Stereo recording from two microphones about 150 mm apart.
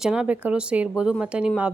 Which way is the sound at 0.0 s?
5° right (ahead or behind).